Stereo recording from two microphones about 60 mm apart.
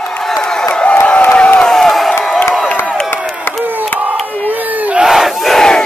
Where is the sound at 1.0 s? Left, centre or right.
Left.